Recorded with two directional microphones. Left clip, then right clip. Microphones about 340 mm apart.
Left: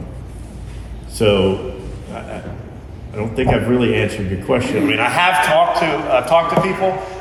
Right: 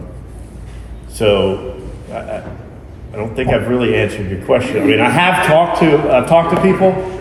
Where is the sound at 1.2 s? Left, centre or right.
Centre.